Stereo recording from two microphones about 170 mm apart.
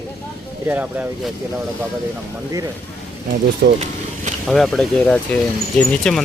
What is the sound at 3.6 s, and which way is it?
Speech, 70° right (ahead or behind).